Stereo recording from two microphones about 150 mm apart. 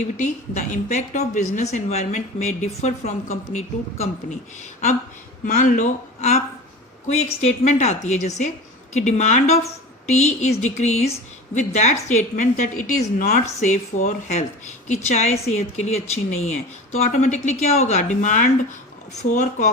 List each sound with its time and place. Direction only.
0.0 s a woman's voice: 50° left (ahead or behind)
5.5 s a woman's voice: 60° left (ahead or behind)